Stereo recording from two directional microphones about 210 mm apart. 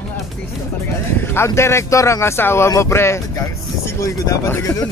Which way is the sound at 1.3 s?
10° left (ahead or behind).